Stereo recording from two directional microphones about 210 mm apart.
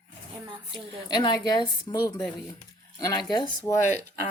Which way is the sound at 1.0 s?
20° left (ahead or behind).